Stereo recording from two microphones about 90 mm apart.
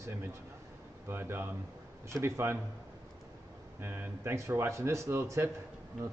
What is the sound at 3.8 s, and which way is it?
Speech, 25° right (ahead or behind).